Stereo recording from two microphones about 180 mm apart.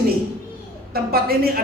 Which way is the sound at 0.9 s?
55° right (ahead or behind).